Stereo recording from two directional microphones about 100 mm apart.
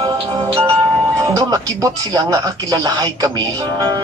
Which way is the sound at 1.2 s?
35° right (ahead or behind).